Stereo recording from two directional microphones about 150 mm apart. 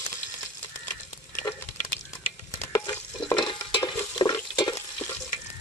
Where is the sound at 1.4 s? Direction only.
25° left (ahead or behind).